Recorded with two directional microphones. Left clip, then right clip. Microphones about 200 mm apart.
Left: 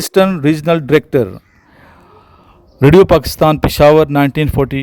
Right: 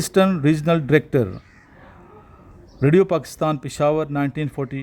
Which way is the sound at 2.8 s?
45° left (ahead or behind).